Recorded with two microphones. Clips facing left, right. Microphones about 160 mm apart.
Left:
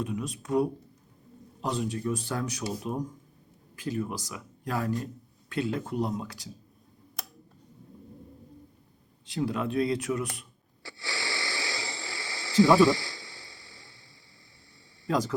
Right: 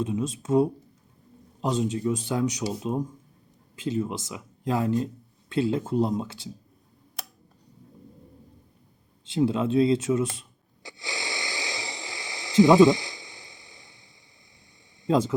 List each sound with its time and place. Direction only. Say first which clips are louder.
0.0 s speech: right 5 dB; 25° right (ahead or behind)
9.2 s speech: right 6 dB; 25° right (ahead or behind)
10.8 s snort: right 1 dB; 20° right (ahead or behind)
15.0 s speech: right 5 dB; 20° right (ahead or behind)